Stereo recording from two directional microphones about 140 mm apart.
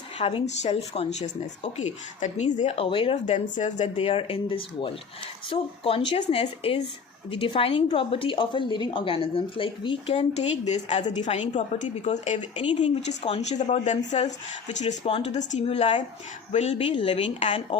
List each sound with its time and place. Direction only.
0.2 s a woman's voice: 40° left (ahead or behind)
3.3 s a woman's voice: 60° left (ahead or behind); by 6.4 s 35° left (ahead or behind)
6.4 s a woman's voice: 45° left (ahead or behind)